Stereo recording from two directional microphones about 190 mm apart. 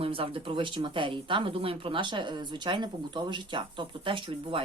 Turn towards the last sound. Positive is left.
turn(degrees=-25)  # may be behind; listen again after turning